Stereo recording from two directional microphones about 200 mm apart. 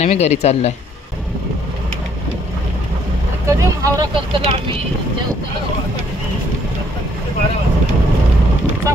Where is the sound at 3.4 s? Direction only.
15° right (ahead or behind).